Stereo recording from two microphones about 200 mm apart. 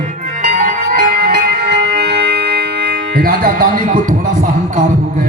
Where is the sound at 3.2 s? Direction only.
45° right (ahead or behind).